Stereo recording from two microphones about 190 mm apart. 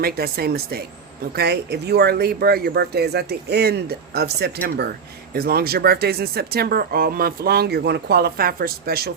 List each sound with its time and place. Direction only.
0.0 s speech: 55° right (ahead or behind)